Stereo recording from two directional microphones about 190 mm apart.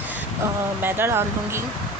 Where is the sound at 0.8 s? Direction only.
10° right (ahead or behind).